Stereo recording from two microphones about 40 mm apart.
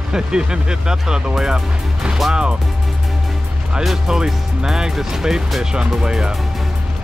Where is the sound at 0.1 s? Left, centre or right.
Centre.